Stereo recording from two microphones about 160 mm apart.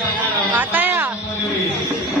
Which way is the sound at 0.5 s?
10° right (ahead or behind).